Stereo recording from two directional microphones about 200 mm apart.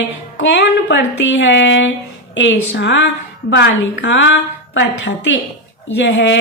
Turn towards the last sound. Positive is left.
turn(degrees=60)  # may be behind; listen again after turning